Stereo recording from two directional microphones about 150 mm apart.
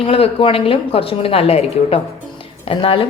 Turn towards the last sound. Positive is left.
turn(degrees=35)  # may be behind; listen again after turning